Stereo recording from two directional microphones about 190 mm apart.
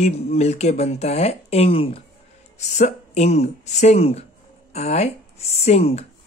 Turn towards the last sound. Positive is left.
turn(degrees=35)  # may be behind; listen again after turning